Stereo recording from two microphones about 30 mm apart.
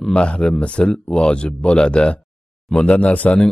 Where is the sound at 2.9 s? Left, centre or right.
Left.